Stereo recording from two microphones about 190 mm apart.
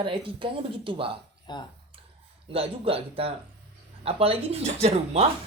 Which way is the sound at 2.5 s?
30° right (ahead or behind).